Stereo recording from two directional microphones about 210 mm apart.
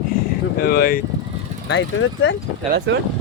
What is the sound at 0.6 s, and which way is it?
Speech, 45° left (ahead or behind).